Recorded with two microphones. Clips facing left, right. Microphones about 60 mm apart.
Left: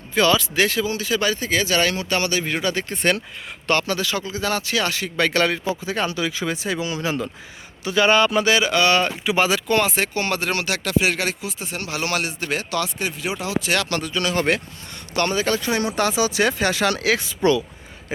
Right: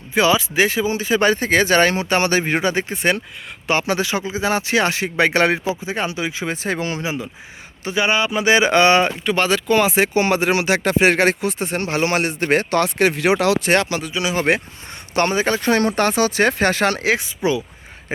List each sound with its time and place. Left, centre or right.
0.1 s speech: centre
6.6 s speech: right
7.9 s speech: centre
8.4 s speech: right
9.2 s speech: centre
9.9 s speech: centre
10.8 s speech: right
11.8 s speech: right
12.3 s speech: right
13.0 s speech: right
13.6 s speech: right
14.1 s speech: centre
15.1 s speech: right
15.6 s speech: right